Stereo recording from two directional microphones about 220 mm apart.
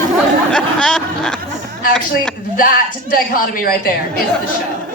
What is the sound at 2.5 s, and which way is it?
A woman's voice, 40° left (ahead or behind).